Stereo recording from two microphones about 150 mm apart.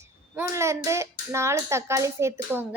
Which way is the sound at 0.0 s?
20° right (ahead or behind).